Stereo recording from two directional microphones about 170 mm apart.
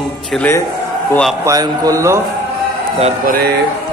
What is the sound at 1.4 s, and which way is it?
Speech, 20° right (ahead or behind).